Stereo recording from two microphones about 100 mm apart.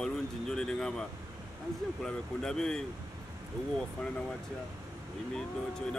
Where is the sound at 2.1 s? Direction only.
5° left (ahead or behind).